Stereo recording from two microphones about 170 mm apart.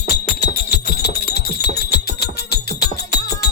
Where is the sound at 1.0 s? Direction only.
70° left (ahead or behind).